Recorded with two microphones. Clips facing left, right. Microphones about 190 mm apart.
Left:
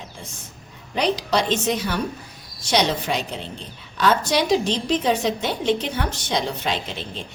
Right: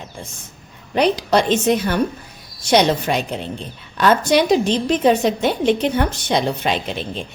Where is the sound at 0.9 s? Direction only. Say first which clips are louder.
Right 5 dB; 55° right (ahead or behind).